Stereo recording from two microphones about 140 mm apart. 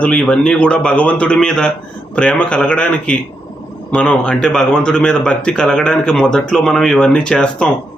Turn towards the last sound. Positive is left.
turn(degrees=5)  # may be behind; listen again after turning